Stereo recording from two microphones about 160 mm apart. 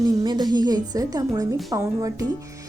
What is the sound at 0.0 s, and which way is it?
A woman's voice, 25° right (ahead or behind).